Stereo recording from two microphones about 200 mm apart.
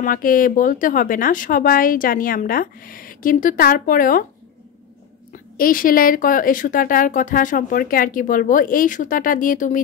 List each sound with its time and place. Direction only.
0.0 s speech: 45° left (ahead or behind)
5.3 s speech: 45° left (ahead or behind)